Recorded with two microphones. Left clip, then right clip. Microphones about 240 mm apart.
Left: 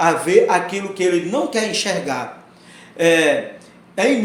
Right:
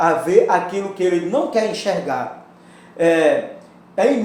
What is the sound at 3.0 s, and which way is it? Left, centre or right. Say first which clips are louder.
Speech: left 1 dB; left.